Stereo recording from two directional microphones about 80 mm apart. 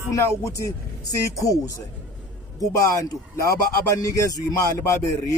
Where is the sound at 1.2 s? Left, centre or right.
Left.